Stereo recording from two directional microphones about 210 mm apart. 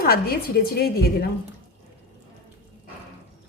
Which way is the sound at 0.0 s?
45° left (ahead or behind).